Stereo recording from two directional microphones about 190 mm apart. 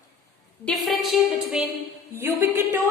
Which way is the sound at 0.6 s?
Centre (ahead or behind).